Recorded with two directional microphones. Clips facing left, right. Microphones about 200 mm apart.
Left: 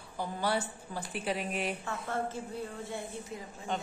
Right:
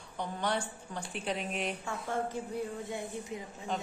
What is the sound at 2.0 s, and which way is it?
A woman's voice, 15° right (ahead or behind).